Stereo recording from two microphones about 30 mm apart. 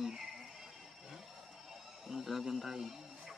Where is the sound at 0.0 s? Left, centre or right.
Centre.